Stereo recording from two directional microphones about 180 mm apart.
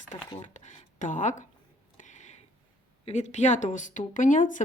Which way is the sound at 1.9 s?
40° left (ahead or behind).